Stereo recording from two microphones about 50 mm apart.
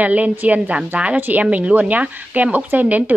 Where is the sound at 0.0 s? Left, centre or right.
Right.